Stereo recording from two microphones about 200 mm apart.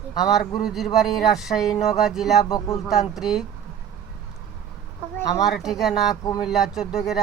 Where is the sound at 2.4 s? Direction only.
15° left (ahead or behind).